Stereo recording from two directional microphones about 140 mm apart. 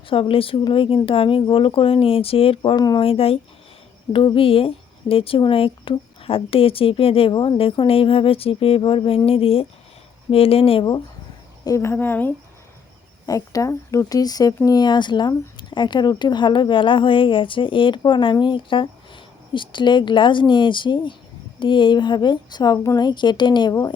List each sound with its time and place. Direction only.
0.1 s speech: 40° left (ahead or behind)
2.6 s speech: 30° left (ahead or behind)
3.0 s speech: 40° left (ahead or behind)
11.6 s speech: 20° left (ahead or behind)
13.2 s speech: 25° left (ahead or behind)